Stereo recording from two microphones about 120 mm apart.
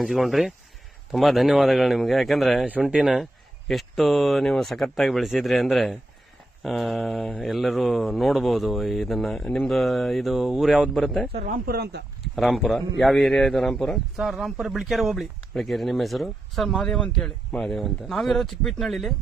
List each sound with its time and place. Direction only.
0.0 s a man's voice: centre (ahead or behind)
11.3 s speech: 75° right (ahead or behind)
12.2 s a man's voice: centre (ahead or behind)